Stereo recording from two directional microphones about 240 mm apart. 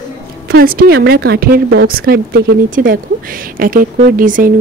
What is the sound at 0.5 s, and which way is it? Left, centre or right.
Speech, right.